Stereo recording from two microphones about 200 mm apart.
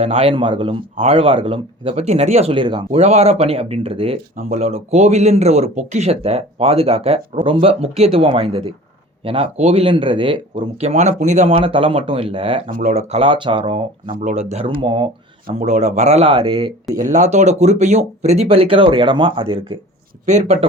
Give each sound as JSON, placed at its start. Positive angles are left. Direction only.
{"t": 0.0, "sound": "a man's voice", "side_deg": -30}
{"t": 12.7, "sound": "a man's voice", "side_deg": -40}
{"t": 15.4, "sound": "speech", "side_deg": -40}
{"t": 17.0, "sound": "speech", "side_deg": -35}